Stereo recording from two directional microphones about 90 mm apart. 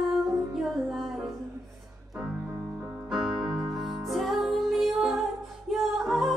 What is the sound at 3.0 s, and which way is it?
Music, centre (ahead or behind).